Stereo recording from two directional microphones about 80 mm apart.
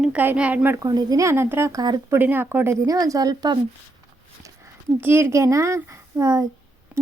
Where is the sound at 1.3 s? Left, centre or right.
Right.